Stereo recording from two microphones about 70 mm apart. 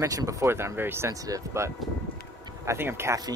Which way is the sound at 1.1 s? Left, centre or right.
Right.